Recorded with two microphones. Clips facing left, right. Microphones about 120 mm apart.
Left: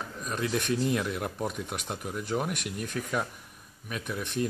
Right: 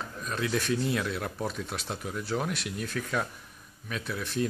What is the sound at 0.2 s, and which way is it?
Speech, 15° left (ahead or behind).